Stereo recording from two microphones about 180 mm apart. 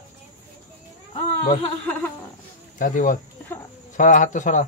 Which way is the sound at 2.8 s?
45° left (ahead or behind).